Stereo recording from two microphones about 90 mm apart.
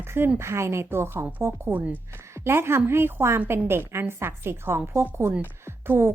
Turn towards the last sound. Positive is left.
turn(degrees=-25)  # may be behind; listen again after turning